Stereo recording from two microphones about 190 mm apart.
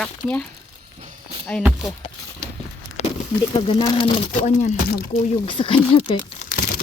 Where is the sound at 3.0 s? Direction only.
35° left (ahead or behind).